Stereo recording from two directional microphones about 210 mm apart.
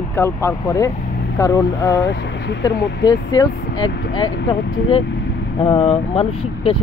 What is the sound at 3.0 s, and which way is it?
Speech, 20° left (ahead or behind).